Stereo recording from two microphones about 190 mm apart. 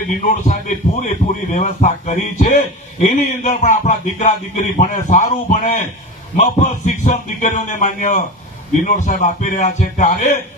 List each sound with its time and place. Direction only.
0.1 s speech: 40° left (ahead or behind)
6.3 s speech: 40° left (ahead or behind)